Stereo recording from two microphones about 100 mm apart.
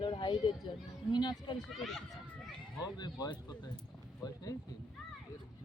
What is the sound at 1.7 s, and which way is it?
Speech, centre (ahead or behind).